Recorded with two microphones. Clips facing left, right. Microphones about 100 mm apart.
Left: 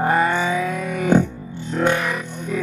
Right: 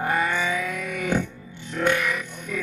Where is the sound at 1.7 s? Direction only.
30° left (ahead or behind).